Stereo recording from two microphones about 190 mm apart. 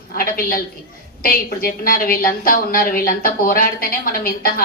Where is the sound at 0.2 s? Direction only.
50° left (ahead or behind).